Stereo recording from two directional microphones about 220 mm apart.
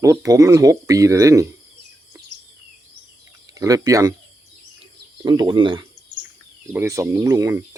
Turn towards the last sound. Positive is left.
turn(degrees=-15)  # may be behind; listen again after turning